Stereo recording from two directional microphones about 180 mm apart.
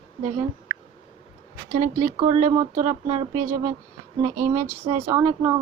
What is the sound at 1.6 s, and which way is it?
Speech, 45° right (ahead or behind).